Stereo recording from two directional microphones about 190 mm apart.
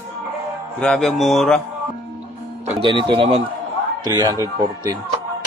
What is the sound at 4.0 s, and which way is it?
Speech, 15° right (ahead or behind).